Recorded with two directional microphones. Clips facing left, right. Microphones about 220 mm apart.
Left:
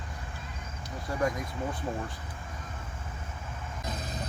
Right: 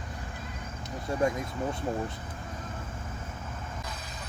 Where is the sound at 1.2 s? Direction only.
25° right (ahead or behind).